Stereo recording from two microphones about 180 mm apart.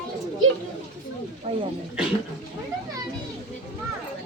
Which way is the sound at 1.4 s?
40° right (ahead or behind).